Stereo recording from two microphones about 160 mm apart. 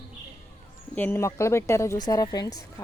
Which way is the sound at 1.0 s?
15° left (ahead or behind).